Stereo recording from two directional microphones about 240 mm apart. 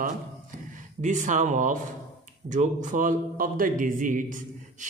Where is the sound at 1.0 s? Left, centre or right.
Right.